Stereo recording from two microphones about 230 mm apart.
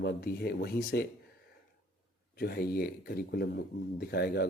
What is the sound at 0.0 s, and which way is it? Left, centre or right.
Speech, left.